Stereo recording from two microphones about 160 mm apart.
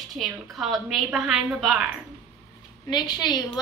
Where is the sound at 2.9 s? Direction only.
25° left (ahead or behind).